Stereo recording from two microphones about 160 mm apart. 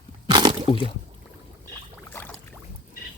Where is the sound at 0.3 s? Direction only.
30° right (ahead or behind).